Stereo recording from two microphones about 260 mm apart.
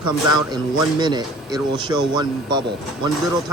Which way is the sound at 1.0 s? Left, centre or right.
Centre.